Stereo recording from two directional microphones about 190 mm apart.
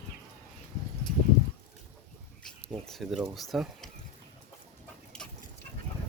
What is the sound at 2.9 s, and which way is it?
Speech, centre (ahead or behind).